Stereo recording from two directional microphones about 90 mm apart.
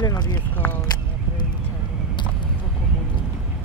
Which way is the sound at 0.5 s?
20° left (ahead or behind).